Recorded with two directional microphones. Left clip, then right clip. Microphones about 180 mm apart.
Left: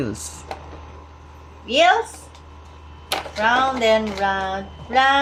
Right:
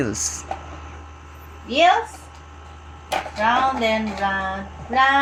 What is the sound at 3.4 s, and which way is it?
Music, 20° left (ahead or behind).